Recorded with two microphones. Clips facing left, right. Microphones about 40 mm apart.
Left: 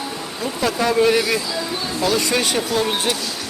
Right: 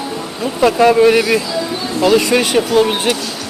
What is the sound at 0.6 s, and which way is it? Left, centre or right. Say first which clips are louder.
Speech: right 8 dB; right.